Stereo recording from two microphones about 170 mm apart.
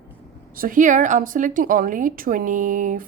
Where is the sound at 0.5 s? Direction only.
55° right (ahead or behind).